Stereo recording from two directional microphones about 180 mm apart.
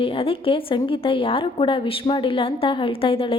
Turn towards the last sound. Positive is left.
turn(degrees=30)  # may be behind; listen again after turning